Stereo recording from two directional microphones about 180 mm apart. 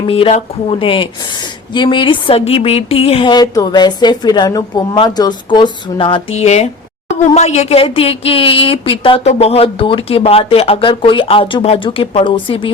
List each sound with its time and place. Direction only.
0.1 s a woman's voice: 35° left (ahead or behind)